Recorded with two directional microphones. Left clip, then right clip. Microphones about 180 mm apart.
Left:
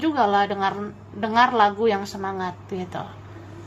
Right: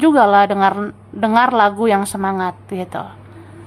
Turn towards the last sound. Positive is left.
turn(degrees=-30)  # may be behind; listen again after turning